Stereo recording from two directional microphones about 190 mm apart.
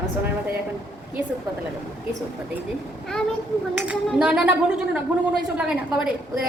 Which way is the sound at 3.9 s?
5° right (ahead or behind).